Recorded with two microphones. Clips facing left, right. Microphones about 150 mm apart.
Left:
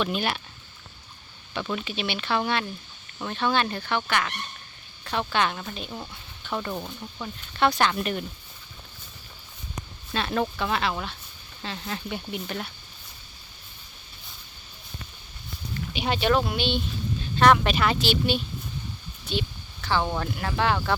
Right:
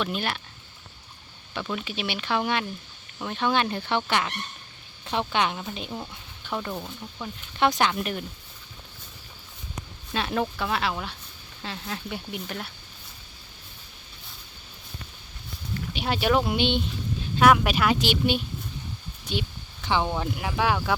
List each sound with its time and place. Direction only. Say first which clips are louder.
0.0 s speech: left 2 dB; centre (ahead or behind)
1.5 s speech: left 1 dB; 5° right (ahead or behind)
7.6 s speech: even; 15° right (ahead or behind)
10.1 s speech: even; 10° right (ahead or behind)
15.9 s speech: even; centre (ahead or behind)
16.4 s speech: right 2 dB; 20° right (ahead or behind)
17.4 s speech: even; 5° right (ahead or behind)
19.3 s a sound: left 1 dB; 15° right (ahead or behind)
20.1 s speech: even; 10° right (ahead or behind)